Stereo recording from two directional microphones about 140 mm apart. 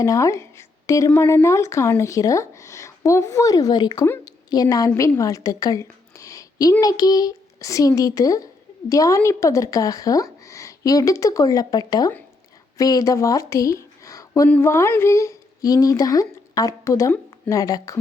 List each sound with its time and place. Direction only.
0.0 s a woman's voice: 25° left (ahead or behind)